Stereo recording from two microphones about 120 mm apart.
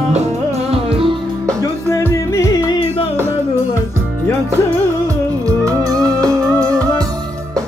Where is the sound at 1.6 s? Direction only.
25° left (ahead or behind).